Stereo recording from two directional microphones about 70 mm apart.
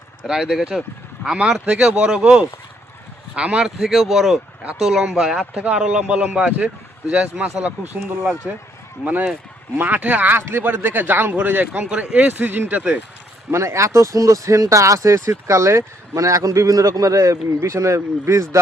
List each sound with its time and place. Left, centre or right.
0.3 s speech: centre
3.8 s speech: centre
5.5 s speech: centre
13.5 s speech: right